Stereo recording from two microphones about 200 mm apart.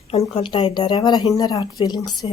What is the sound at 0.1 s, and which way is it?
A woman's voice, 30° left (ahead or behind).